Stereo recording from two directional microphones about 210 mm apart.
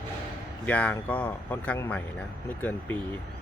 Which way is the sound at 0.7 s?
5° left (ahead or behind).